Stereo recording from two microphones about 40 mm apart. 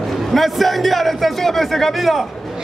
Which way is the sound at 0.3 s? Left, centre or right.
Centre.